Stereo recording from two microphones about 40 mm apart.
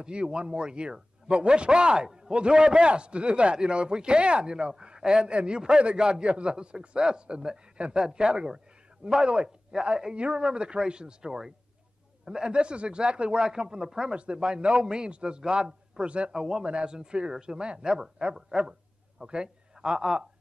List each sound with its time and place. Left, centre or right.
0.0 s a man's voice: right
14.1 s a man's voice: right
16.3 s a man's voice: centre